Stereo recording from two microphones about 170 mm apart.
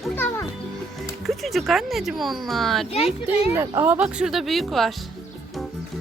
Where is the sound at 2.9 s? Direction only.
35° left (ahead or behind).